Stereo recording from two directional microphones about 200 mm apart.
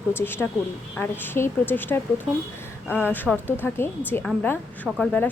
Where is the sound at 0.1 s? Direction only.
10° left (ahead or behind).